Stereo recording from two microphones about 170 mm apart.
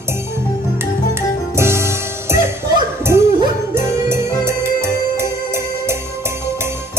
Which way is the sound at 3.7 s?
15° right (ahead or behind).